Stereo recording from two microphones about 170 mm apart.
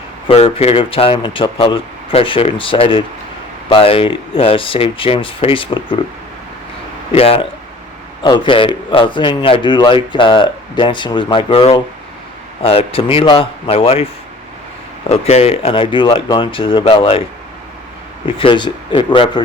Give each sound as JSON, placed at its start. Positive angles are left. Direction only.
{"t": 0.3, "sound": "speech", "side_deg": 35}
{"t": 7.1, "sound": "a man's voice", "side_deg": 35}
{"t": 15.1, "sound": "speech", "side_deg": 40}
{"t": 18.3, "sound": "a man's voice", "side_deg": 30}